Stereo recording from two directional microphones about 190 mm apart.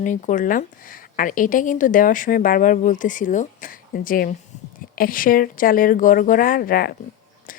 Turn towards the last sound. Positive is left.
turn(degrees=50)  # may be behind; listen again after turning